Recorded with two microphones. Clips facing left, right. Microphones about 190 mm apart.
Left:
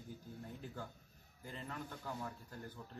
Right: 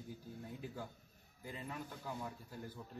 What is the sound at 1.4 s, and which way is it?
A man's voice, 10° right (ahead or behind).